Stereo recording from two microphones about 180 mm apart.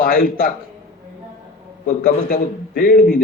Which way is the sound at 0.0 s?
55° left (ahead or behind).